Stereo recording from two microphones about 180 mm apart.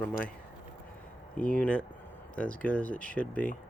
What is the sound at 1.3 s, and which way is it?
Speech, 10° left (ahead or behind).